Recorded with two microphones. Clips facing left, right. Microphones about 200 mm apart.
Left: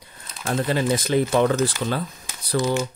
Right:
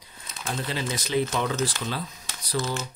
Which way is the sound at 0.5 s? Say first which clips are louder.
Left 9 dB; 50° left (ahead or behind).